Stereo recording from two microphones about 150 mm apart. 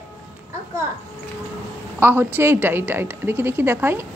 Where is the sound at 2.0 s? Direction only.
15° right (ahead or behind).